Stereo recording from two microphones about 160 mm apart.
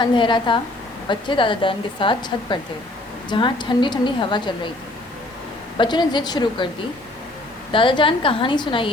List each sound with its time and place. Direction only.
0.0 s a woman's voice: 30° left (ahead or behind)
5.7 s a woman's voice: 30° left (ahead or behind)
7.7 s a woman's voice: 30° left (ahead or behind)